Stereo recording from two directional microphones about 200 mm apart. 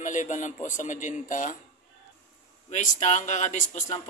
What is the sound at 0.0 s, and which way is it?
Speech, 40° left (ahead or behind).